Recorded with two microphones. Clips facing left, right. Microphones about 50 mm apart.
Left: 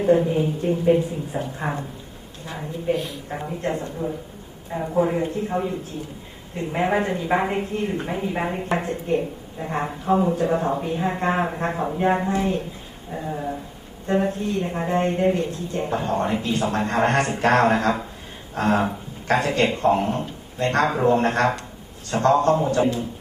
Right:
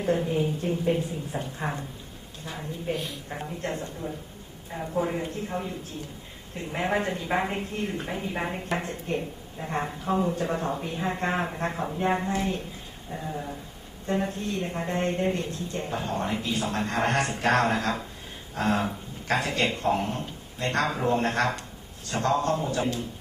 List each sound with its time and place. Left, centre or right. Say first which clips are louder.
0.0 s speech: left 7 dB; centre
1.5 s speech: left 3 dB; centre
2.9 s a woman's voice: left 8 dB; centre
6.6 s speech: left 5 dB; centre